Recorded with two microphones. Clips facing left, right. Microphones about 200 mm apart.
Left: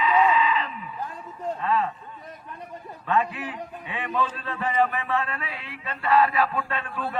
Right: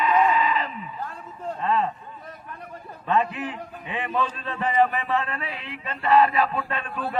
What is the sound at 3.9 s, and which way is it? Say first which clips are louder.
A man's voice: right 1 dB; 20° right (ahead or behind).